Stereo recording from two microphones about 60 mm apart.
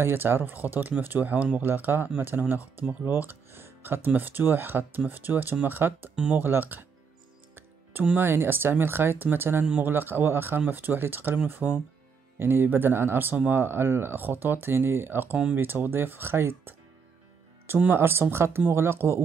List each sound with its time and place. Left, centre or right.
0.0 s speech: right
3.1 s speech: right
8.2 s speech: right
17.9 s speech: right